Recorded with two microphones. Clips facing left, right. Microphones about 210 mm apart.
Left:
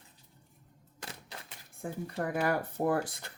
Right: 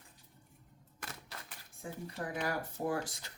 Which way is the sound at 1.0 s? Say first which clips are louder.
Left 2 dB; 30° left (ahead or behind).